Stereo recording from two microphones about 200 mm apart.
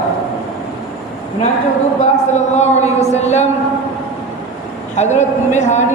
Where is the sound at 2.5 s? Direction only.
35° left (ahead or behind).